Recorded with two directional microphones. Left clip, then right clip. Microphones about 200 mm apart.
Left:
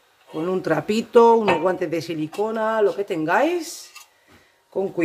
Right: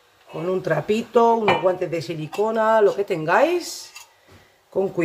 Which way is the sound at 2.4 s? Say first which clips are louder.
Right 4 dB; centre (ahead or behind).